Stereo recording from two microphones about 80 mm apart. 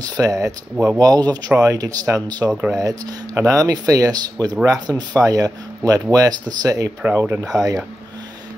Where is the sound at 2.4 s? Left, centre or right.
Right.